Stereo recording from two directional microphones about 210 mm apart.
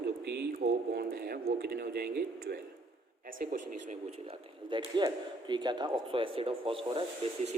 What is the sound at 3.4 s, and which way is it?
Speech, 40° right (ahead or behind).